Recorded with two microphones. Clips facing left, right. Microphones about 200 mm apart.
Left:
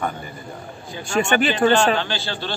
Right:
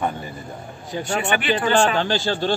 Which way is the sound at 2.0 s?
45° right (ahead or behind).